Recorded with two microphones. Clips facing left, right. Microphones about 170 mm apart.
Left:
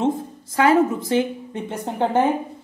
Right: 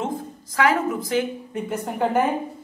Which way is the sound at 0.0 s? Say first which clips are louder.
Left 6 dB; 25° left (ahead or behind).